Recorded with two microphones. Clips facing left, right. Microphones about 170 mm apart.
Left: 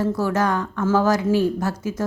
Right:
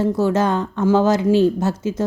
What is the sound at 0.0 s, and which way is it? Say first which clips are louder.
Speech: right 3 dB; 25° right (ahead or behind).